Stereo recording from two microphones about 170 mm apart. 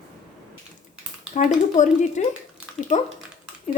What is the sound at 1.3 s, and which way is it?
Speech, 45° left (ahead or behind).